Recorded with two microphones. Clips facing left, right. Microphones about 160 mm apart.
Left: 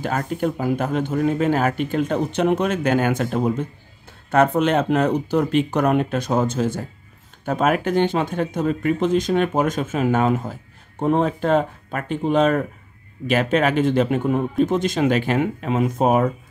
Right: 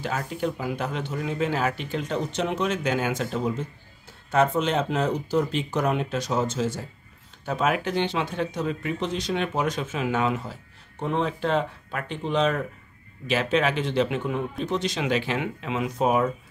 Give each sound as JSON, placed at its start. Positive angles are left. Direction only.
{"t": 0.0, "sound": "speech", "side_deg": 50}